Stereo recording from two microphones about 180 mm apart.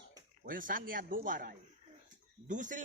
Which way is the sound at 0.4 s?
50° right (ahead or behind).